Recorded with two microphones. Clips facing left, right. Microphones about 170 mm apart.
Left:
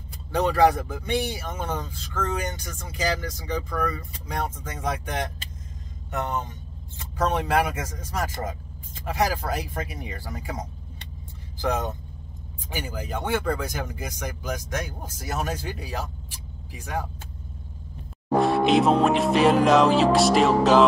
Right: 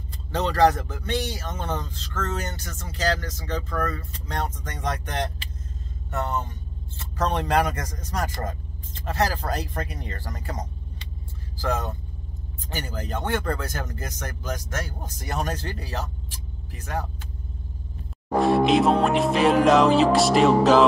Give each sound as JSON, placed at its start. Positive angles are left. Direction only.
{"t": 0.3, "sound": "speech", "side_deg": 10}
{"t": 11.5, "sound": "speech", "side_deg": 20}
{"t": 18.3, "sound": "music", "side_deg": 0}